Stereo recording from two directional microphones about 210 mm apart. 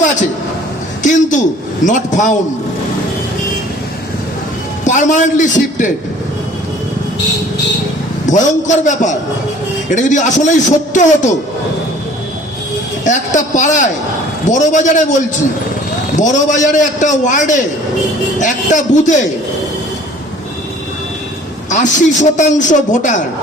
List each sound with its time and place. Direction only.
1.0 s a man's voice: 35° left (ahead or behind)
4.9 s a man's voice: 35° left (ahead or behind)
8.3 s a man's voice: 35° left (ahead or behind)
13.1 s a man's voice: 35° left (ahead or behind)
16.1 s a man's voice: 35° left (ahead or behind)
21.7 s a man's voice: 35° left (ahead or behind)